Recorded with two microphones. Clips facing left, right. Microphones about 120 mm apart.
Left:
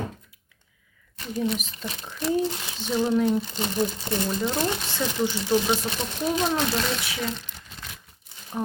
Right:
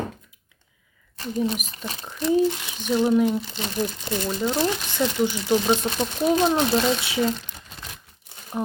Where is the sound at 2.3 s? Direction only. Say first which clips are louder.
Right 7 dB; 15° right (ahead or behind).